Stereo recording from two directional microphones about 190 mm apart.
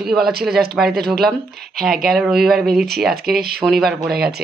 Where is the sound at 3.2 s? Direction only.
55° right (ahead or behind).